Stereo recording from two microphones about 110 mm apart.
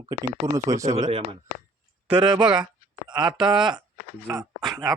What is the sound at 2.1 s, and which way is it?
Speech, 45° right (ahead or behind).